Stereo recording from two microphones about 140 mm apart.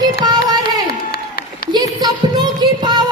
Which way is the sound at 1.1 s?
90° left.